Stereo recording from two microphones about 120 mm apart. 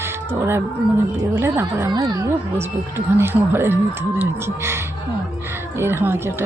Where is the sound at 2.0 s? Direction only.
35° right (ahead or behind).